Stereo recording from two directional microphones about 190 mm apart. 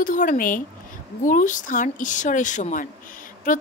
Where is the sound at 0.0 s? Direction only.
45° left (ahead or behind).